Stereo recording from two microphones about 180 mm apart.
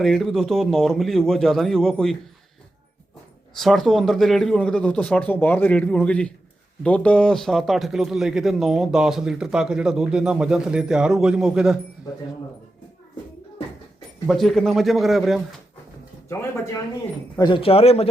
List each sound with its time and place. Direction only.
0.0 s speech: centre (ahead or behind)
3.6 s speech: centre (ahead or behind)
14.3 s speech: centre (ahead or behind)
16.3 s speech: 15° left (ahead or behind); by 18.1 s 35° left (ahead or behind)